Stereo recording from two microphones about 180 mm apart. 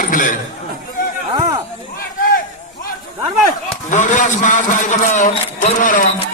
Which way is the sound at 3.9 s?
45° left (ahead or behind).